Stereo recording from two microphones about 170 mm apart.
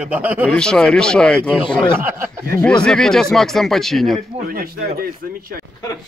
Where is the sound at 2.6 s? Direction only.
5° left (ahead or behind).